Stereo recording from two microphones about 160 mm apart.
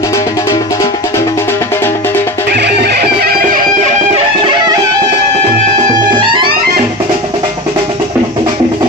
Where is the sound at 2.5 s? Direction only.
90° right; by 3.6 s 70° right (ahead or behind).